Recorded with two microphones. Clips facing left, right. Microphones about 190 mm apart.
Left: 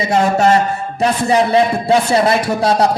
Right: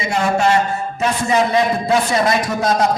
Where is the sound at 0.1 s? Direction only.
35° left (ahead or behind).